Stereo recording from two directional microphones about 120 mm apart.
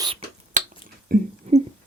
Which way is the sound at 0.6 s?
90° right.